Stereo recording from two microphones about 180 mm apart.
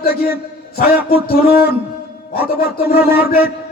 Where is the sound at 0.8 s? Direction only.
55° left (ahead or behind).